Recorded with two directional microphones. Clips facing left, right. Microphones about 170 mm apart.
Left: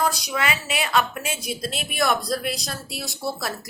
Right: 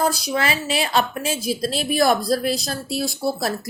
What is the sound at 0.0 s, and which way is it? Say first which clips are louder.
Speech: right 3 dB; 35° right (ahead or behind).